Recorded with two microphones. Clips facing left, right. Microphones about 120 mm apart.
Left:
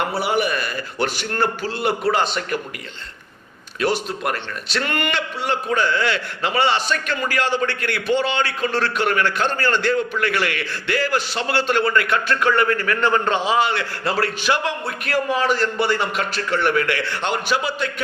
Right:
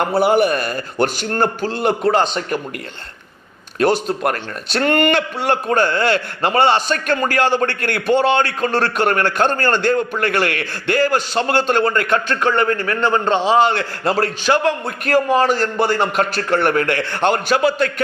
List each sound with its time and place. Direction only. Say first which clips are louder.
0.0 s a man's voice: right 6 dB; 45° right (ahead or behind)
4.2 s a man's voice: right 4 dB; 50° right (ahead or behind)